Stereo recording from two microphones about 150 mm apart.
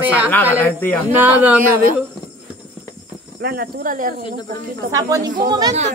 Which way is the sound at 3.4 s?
85° right.